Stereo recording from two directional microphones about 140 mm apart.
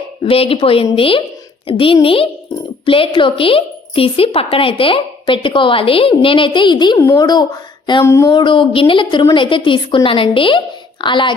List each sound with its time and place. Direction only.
0.2 s a woman's voice: 40° left (ahead or behind)
8.0 s speech: 20° left (ahead or behind)
8.3 s a woman's voice: 35° left (ahead or behind)